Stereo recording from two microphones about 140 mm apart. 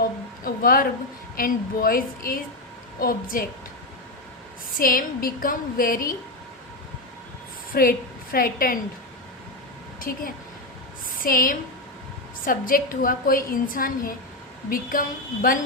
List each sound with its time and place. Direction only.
0.4 s a sound: 90° left
1.4 s a woman's voice: 90° left
4.8 s a woman's voice: 90° left
7.7 s a woman's voice: 90° left
10.0 s a woman's voice: 90° left